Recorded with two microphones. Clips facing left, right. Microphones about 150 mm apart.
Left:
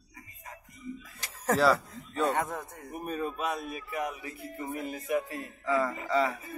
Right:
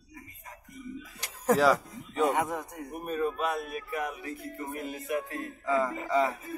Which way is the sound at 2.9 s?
Centre (ahead or behind).